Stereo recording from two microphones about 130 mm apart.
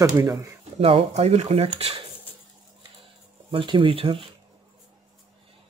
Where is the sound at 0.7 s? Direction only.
50° right (ahead or behind).